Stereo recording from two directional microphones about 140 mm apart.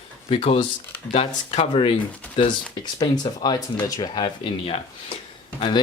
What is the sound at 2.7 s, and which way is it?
Speech, 30° left (ahead or behind).